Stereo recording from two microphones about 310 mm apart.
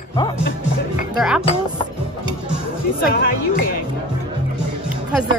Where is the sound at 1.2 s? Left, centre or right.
Centre.